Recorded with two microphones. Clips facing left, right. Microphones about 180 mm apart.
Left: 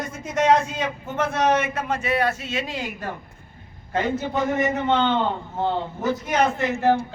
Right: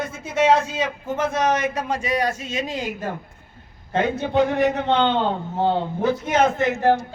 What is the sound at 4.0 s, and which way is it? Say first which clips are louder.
A man's voice: right 4 dB; 65° right (ahead or behind).